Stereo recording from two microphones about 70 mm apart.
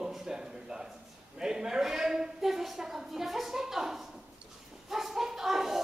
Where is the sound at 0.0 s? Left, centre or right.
Centre.